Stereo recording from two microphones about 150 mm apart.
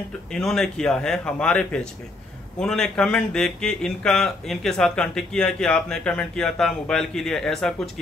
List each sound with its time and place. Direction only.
0.3 s speech: 5° left (ahead or behind)